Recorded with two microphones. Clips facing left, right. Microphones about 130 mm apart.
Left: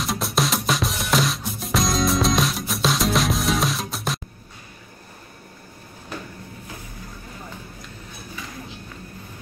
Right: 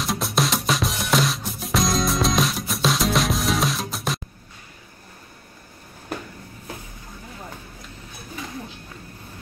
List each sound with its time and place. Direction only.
0.0 s music: centre (ahead or behind)